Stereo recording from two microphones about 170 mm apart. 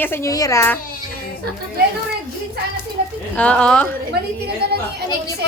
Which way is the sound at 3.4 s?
5° left (ahead or behind).